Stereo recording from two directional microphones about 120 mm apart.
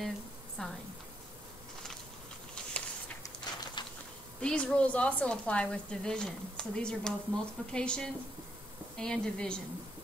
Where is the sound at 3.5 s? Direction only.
35° left (ahead or behind).